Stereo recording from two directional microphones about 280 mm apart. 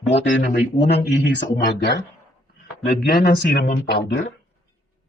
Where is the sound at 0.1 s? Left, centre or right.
Left.